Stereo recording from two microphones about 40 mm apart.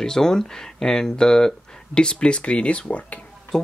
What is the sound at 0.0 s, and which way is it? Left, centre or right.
Speech, centre.